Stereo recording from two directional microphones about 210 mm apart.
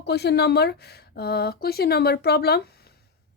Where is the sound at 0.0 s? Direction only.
50° left (ahead or behind).